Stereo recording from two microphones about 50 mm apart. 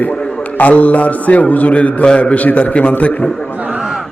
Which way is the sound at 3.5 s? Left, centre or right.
Right.